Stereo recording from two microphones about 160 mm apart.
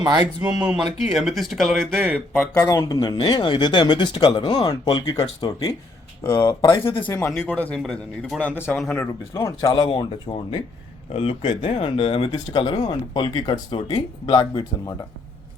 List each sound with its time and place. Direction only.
0.0 s speech: 25° right (ahead or behind)
1.0 s a man's voice: centre (ahead or behind)
2.6 s speech: 25° left (ahead or behind)
7.0 s a man's voice: 10° left (ahead or behind)
9.3 s speech: 20° left (ahead or behind)